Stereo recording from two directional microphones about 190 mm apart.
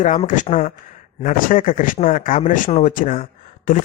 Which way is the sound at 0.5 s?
40° left (ahead or behind).